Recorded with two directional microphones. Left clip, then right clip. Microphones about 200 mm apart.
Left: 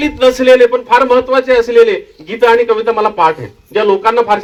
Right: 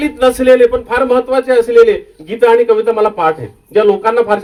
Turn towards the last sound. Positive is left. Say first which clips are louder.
# left 1 dB
turn(degrees=-55)  # may be behind; listen again after turning